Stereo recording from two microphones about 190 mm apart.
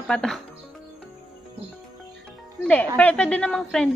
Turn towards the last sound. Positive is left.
turn(degrees=0)  # may be behind; listen again after turning